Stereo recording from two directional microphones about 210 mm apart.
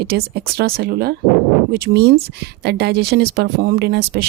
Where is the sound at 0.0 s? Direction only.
50° right (ahead or behind).